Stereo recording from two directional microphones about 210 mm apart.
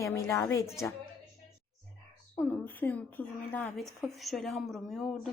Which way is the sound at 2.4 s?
10° left (ahead or behind).